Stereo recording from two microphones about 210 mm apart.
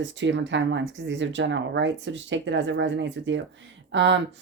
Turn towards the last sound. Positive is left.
turn(degrees=-60)  # may be behind; listen again after turning